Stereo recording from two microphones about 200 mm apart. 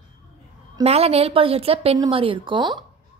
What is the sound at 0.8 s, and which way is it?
A woman's voice, 30° right (ahead or behind).